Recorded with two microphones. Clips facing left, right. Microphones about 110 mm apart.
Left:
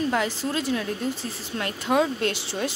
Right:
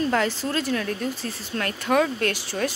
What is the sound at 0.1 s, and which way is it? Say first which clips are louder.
Speech: right 2 dB; 15° left (ahead or behind).